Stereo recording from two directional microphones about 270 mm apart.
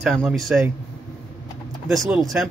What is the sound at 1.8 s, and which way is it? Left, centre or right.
Speech, centre.